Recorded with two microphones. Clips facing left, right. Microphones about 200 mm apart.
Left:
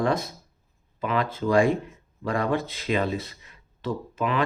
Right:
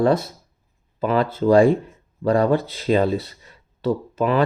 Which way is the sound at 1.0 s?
40° right (ahead or behind).